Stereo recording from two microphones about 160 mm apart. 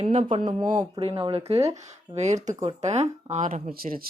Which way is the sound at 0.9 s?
30° right (ahead or behind).